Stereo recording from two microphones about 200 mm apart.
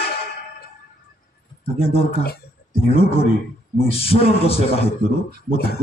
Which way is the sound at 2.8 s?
30° left (ahead or behind).